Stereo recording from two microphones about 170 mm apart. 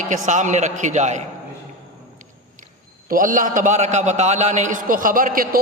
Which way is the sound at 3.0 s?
55° right (ahead or behind).